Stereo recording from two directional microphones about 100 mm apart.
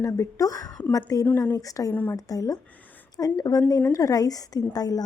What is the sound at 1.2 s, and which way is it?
Speech, 20° left (ahead or behind).